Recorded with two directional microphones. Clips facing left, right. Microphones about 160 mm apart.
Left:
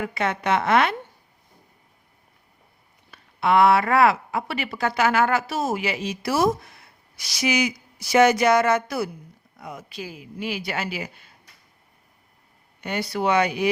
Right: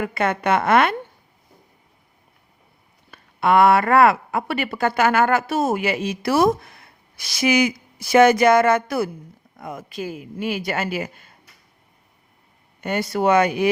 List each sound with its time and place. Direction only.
0.0 s speech: 55° right (ahead or behind)
3.1 s speech: 50° right (ahead or behind)
12.8 s speech: 50° right (ahead or behind)